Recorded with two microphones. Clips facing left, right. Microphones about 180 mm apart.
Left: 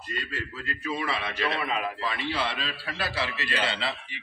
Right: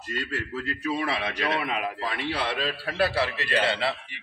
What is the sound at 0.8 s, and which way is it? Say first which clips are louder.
A man's voice: right 2 dB; 70° right (ahead or behind).